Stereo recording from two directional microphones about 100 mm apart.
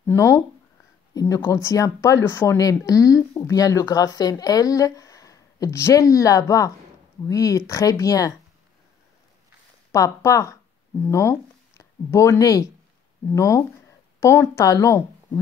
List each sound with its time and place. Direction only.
0.0 s a woman's voice: 30° left (ahead or behind)
9.9 s a woman's voice: 30° left (ahead or behind)